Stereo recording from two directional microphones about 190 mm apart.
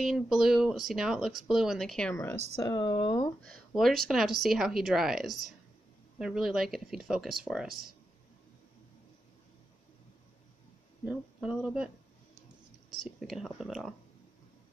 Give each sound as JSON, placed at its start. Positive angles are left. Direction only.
{"t": 0.0, "sound": "speech", "side_deg": 0}
{"t": 2.6, "sound": "speech", "side_deg": 20}
{"t": 3.4, "sound": "speech", "side_deg": 0}
{"t": 11.1, "sound": "speech", "side_deg": -5}
{"t": 13.0, "sound": "speech", "side_deg": 0}